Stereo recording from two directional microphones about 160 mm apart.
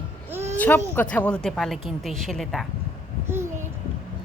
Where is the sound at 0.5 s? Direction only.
10° left (ahead or behind).